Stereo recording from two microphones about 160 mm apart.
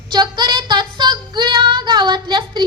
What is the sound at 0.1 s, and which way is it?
Child singing, 25° right (ahead or behind).